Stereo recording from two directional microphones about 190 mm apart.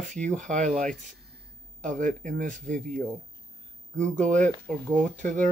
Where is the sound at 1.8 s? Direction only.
40° right (ahead or behind).